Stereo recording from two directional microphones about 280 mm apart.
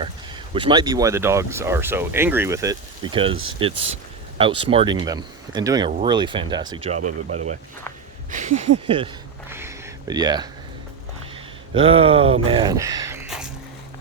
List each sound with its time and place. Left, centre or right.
0.5 s speech: centre
9.5 s a sound: centre
11.7 s speech: centre